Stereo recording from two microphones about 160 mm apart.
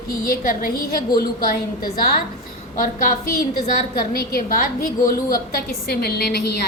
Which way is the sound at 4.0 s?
70° left (ahead or behind).